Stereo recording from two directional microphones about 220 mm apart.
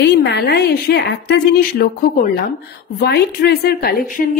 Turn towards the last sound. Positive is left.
turn(degrees=45)  # may be behind; listen again after turning